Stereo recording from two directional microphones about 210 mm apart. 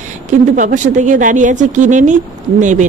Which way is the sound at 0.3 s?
35° right (ahead or behind).